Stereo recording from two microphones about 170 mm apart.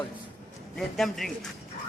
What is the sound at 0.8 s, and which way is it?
Speech, centre (ahead or behind).